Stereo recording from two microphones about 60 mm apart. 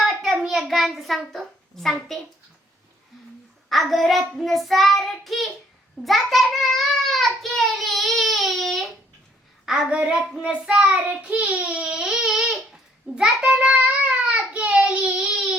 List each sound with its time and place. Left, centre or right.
0.0 s a sound: centre
3.7 s child singing: centre
9.6 s child singing: centre
10.0 s a child's voice: centre